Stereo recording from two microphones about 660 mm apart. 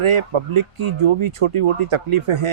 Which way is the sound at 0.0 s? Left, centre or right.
Right.